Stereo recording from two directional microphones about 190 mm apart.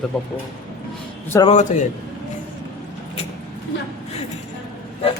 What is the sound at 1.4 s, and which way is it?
Speech, 40° left (ahead or behind).